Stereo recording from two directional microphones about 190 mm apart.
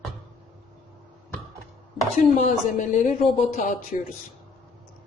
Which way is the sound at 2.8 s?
35° left (ahead or behind).